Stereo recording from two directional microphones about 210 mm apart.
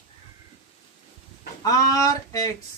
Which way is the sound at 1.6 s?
15° left (ahead or behind).